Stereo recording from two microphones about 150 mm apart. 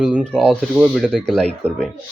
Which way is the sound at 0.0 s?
5° right (ahead or behind).